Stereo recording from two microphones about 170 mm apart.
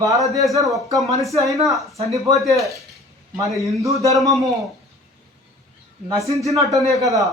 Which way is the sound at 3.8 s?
20° right (ahead or behind).